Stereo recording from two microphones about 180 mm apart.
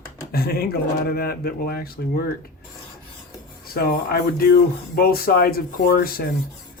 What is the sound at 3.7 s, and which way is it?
Speech, 55° left (ahead or behind).